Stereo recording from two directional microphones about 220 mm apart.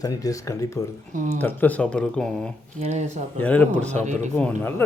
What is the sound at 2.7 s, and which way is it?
Speech, 30° right (ahead or behind).